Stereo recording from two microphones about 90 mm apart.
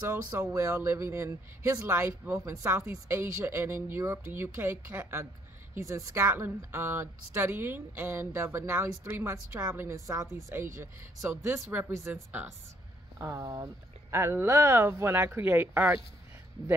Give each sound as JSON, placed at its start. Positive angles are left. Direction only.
{"t": 0.0, "sound": "a woman's voice", "side_deg": -30}